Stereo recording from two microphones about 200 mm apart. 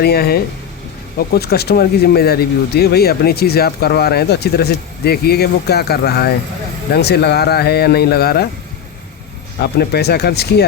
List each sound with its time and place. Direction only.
0.0 s speech: 50° left (ahead or behind)
9.6 s speech: 55° left (ahead or behind)